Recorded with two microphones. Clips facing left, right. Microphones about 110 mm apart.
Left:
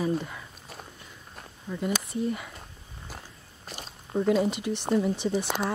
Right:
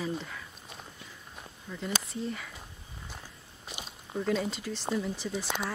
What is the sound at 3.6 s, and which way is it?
Walk, 5° right (ahead or behind).